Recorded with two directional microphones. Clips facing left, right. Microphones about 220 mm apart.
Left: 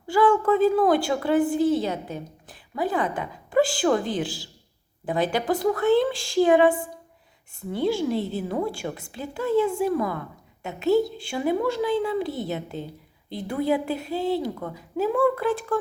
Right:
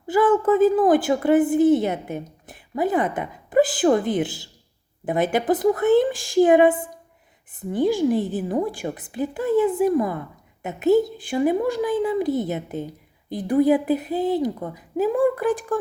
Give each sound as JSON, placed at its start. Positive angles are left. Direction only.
{"t": 0.1, "sound": "a sound", "side_deg": -20}
{"t": 0.6, "sound": "a woman's voice", "side_deg": -20}
{"t": 6.1, "sound": "speech", "side_deg": -50}
{"t": 6.4, "sound": "a woman's voice", "side_deg": -20}